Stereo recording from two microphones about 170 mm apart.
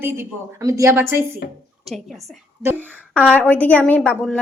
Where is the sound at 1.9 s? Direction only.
Centre (ahead or behind).